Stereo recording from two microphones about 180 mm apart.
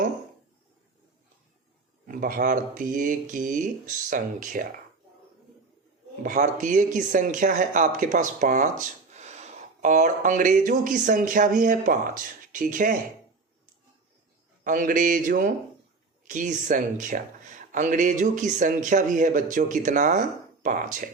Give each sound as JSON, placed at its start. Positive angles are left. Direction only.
{"t": 2.0, "sound": "speech", "side_deg": -50}
{"t": 6.2, "sound": "speech", "side_deg": -45}
{"t": 14.6, "sound": "speech", "side_deg": -45}